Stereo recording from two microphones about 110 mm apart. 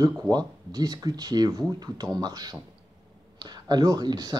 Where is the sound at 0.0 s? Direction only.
35° right (ahead or behind).